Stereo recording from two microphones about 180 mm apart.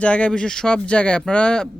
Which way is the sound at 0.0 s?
5° left (ahead or behind).